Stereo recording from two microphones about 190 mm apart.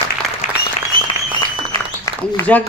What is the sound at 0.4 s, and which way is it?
Applause, 40° left (ahead or behind).